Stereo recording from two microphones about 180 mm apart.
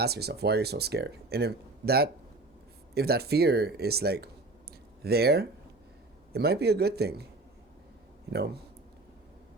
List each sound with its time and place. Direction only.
0.0 s speech: 65° right (ahead or behind)